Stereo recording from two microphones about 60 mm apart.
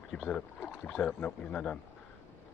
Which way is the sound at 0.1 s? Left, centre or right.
Left.